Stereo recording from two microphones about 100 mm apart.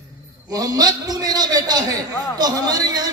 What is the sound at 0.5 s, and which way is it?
A man's voice, 40° right (ahead or behind).